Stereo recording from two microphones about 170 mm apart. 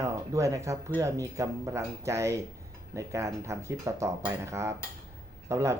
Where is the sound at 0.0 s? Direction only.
20° right (ahead or behind).